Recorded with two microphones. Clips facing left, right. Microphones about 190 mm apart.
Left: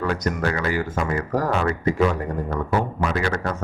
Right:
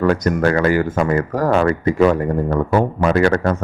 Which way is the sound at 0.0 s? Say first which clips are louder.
Right 8 dB; 55° right (ahead or behind).